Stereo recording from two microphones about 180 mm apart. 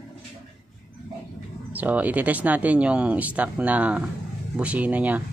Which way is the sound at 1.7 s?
10° right (ahead or behind).